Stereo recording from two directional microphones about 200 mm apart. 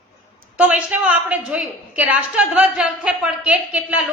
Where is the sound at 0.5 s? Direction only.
5° right (ahead or behind).